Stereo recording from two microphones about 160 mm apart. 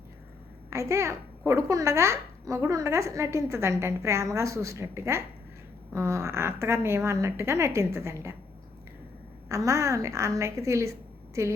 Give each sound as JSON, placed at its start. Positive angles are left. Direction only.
{"t": 0.7, "sound": "a child's voice", "side_deg": -20}
{"t": 9.5, "sound": "a woman's voice", "side_deg": -20}